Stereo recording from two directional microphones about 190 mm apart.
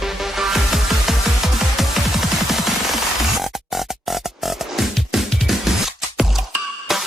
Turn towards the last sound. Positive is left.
turn(degrees=0)  # may be behind; listen again after turning